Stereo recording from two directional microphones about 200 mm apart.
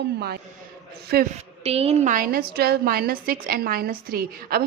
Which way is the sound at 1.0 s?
50° right (ahead or behind).